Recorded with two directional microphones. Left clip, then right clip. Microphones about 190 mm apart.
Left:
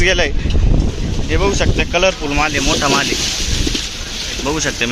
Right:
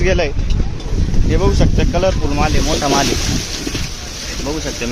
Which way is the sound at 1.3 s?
15° right (ahead or behind).